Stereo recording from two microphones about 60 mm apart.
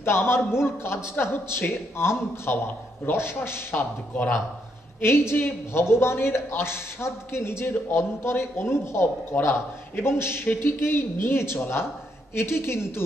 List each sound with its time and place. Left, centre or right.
0.0 s a man's voice: left
5.0 s a man's voice: left